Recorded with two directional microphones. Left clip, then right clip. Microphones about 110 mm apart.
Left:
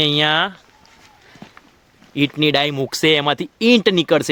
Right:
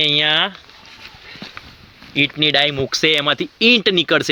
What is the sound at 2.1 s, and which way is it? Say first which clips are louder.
Speech: right 2 dB; 90° left.